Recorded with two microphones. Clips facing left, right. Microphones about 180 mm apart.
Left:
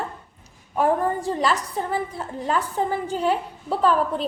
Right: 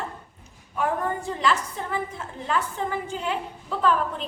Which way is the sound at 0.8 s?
35° left (ahead or behind).